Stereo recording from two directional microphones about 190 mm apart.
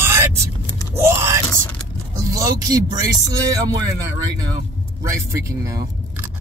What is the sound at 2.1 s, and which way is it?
Speech, 15° right (ahead or behind).